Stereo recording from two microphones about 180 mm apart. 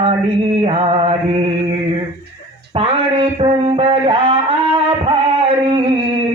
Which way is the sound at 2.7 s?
30° right (ahead or behind).